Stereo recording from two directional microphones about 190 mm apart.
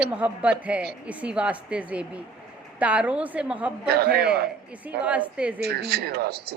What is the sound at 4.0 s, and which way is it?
Speech, 60° right (ahead or behind).